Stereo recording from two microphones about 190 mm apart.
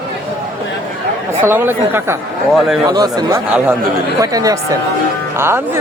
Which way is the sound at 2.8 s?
20° right (ahead or behind).